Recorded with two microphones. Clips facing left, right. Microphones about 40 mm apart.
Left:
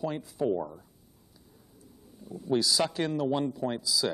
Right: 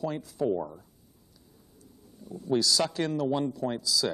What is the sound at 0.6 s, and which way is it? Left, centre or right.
Speech, centre.